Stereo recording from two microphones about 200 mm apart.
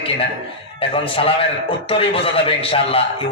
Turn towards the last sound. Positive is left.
turn(degrees=30)  # may be behind; listen again after turning